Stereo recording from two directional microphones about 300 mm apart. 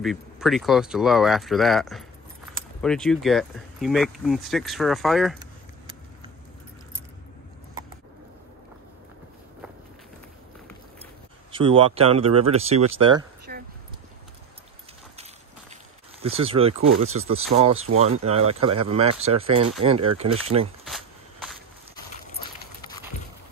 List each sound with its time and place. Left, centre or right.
0.0 s speech: centre
11.5 s speech: centre
13.5 s a sound: right
16.2 s speech: centre
20.8 s cricket: centre